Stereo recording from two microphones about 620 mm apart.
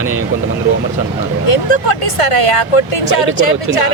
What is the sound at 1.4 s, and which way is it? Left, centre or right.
Speech, left.